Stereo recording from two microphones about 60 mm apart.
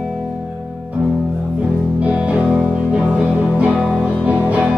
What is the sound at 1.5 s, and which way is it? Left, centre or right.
Music, right.